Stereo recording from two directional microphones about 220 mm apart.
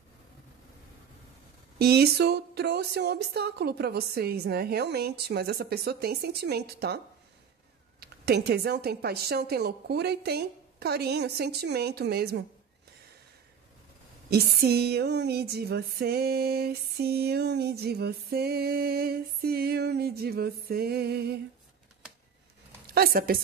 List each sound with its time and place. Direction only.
1.8 s music: 45° right (ahead or behind)
8.0 s music: 45° right (ahead or behind)
14.3 s music: 45° right (ahead or behind)
22.8 s a woman's voice: 45° right (ahead or behind)